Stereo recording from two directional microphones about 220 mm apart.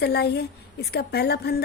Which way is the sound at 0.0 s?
50° left (ahead or behind).